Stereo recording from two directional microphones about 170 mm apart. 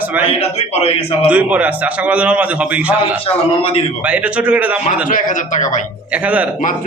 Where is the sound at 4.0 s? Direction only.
5° right (ahead or behind).